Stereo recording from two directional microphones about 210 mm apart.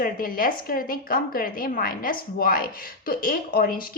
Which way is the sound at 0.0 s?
40° left (ahead or behind).